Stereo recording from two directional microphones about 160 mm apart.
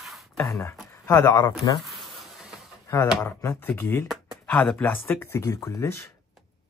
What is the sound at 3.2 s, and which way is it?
Speech, 15° left (ahead or behind).